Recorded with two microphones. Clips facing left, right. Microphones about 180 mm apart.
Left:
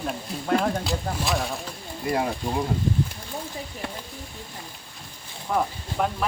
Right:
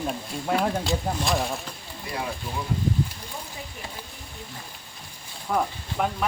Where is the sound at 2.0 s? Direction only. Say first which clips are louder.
Left 7 dB; 50° left (ahead or behind).